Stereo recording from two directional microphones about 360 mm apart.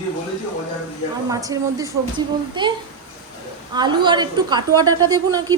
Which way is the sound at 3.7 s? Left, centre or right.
Centre.